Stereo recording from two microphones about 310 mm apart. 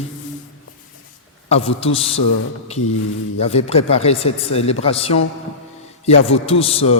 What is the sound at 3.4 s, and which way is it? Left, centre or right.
A man's voice, centre.